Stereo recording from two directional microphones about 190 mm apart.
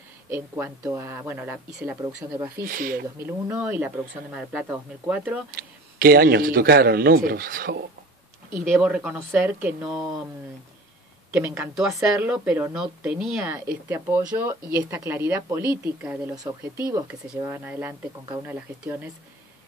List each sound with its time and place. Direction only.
0.3 s a woman's voice: 15° right (ahead or behind)
2.5 s a man's voice: 50° right (ahead or behind)
3.2 s a woman's voice: 10° right (ahead or behind)
5.6 s a man's voice: 55° right (ahead or behind)
8.5 s a woman's voice: 10° right (ahead or behind)
11.3 s a woman's voice: 10° right (ahead or behind)
13.8 s a woman's voice: 15° right (ahead or behind)